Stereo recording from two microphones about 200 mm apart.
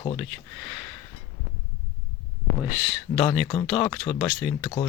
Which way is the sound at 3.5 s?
20° left (ahead or behind).